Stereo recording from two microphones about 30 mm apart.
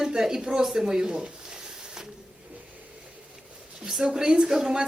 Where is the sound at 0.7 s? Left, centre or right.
Centre.